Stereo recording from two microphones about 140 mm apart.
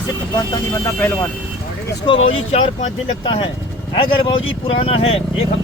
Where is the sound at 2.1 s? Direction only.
40° left (ahead or behind).